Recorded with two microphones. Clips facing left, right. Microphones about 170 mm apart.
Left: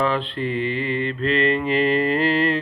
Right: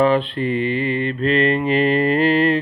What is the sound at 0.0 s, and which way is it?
Mantra, 15° right (ahead or behind).